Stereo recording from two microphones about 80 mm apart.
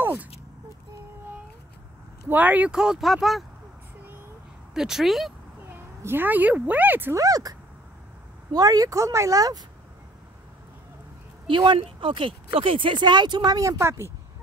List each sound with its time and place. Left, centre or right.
0.0 s a sound: centre
2.2 s speech: right
2.7 s speech: centre
4.7 s speech: centre
5.7 s speech: right
7.2 s speech: right
11.4 s speech: right